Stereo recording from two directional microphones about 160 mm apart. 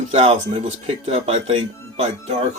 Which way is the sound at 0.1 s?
40° right (ahead or behind).